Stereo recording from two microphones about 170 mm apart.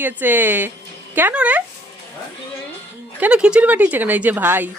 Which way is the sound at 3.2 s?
5° right (ahead or behind).